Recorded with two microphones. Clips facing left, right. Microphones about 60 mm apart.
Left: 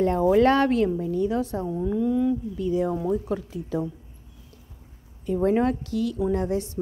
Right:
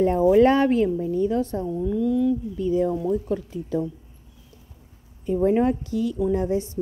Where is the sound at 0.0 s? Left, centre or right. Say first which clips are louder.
Right 2 dB; centre.